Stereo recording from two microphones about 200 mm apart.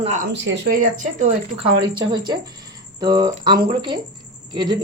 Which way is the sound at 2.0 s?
20° right (ahead or behind).